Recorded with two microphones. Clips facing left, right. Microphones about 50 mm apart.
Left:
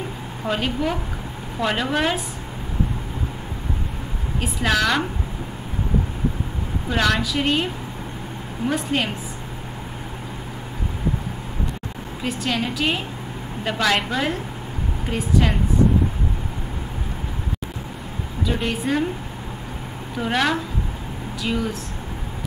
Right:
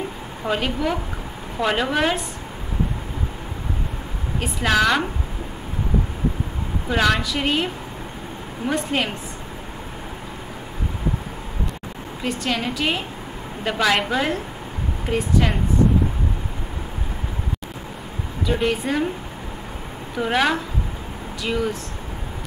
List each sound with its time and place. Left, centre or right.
0.5 s a woman's voice: centre
4.4 s a woman's voice: centre
6.9 s a woman's voice: centre
12.2 s a woman's voice: centre
18.4 s a woman's voice: centre
20.2 s a woman's voice: centre